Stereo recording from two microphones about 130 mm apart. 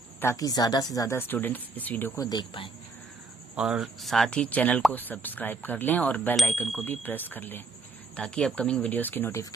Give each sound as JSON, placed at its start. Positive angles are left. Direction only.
{"t": 0.2, "sound": "speech", "side_deg": 25}
{"t": 2.2, "sound": "speech", "side_deg": 35}
{"t": 3.5, "sound": "speech", "side_deg": -5}
{"t": 6.8, "sound": "speech", "side_deg": 15}